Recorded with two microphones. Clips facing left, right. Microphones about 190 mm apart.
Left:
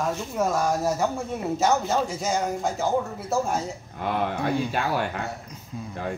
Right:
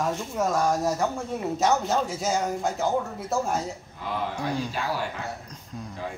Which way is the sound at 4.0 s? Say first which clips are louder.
Left 5 dB; 60° left (ahead or behind).